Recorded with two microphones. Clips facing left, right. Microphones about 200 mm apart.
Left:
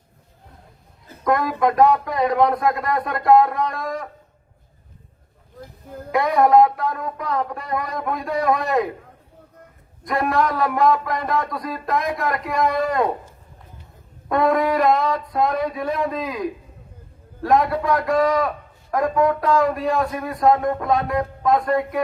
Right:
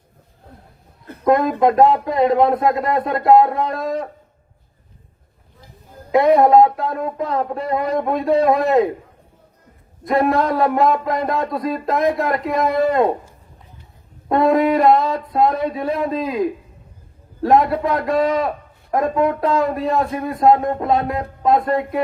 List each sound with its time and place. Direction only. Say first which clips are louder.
1.2 s a man's voice: right 5 dB; 25° right (ahead or behind)
6.1 s a man's voice: right 4 dB; 25° right (ahead or behind)
10.1 s a man's voice: right 4 dB; 25° right (ahead or behind)
14.3 s a man's voice: right 4 dB; 25° right (ahead or behind)